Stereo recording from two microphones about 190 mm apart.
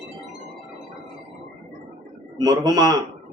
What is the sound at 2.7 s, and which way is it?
Speech, 20° right (ahead or behind).